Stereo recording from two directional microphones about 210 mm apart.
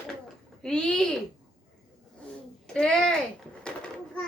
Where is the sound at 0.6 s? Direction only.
5° left (ahead or behind).